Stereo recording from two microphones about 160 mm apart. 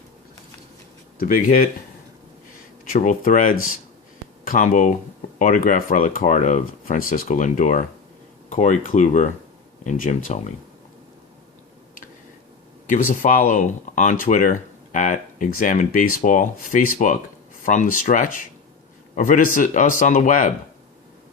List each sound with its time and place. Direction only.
1.2 s speech: 60° left (ahead or behind)
2.9 s speech: 50° left (ahead or behind)
12.9 s speech: 55° left (ahead or behind)